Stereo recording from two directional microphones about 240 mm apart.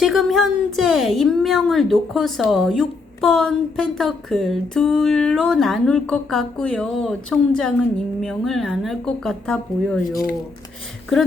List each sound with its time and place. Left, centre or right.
0.0 s a woman's voice: centre
10.1 s speech: left